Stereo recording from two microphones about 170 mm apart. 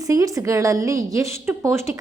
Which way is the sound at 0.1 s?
20° right (ahead or behind).